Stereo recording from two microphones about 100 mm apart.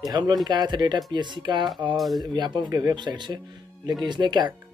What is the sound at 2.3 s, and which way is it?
Speech, 50° right (ahead or behind).